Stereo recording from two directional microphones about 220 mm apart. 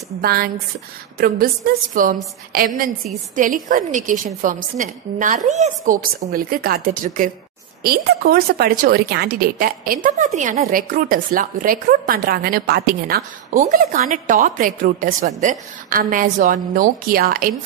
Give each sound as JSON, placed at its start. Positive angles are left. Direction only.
{"t": 0.2, "sound": "a woman's voice", "side_deg": -45}